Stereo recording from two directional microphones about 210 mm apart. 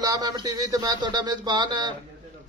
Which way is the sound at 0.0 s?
20° right (ahead or behind).